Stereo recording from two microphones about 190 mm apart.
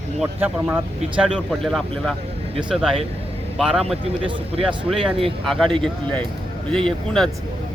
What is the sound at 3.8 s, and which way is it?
Speech, 30° right (ahead or behind).